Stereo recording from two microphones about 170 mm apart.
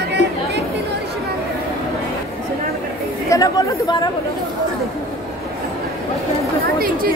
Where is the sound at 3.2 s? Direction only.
20° left (ahead or behind).